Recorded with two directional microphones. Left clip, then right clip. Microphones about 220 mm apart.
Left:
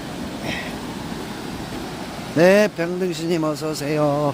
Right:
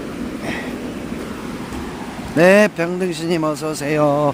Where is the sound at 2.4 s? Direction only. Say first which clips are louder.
Right 3 dB; 15° right (ahead or behind).